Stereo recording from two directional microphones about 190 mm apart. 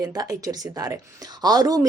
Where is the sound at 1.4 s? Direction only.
20° right (ahead or behind).